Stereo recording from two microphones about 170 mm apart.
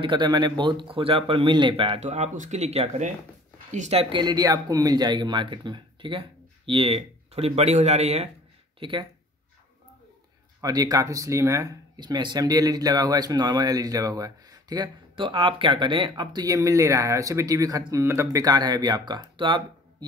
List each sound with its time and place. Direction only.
0.0 s speech: 25° right (ahead or behind)
8.7 s speech: 30° right (ahead or behind)
10.6 s speech: 20° right (ahead or behind)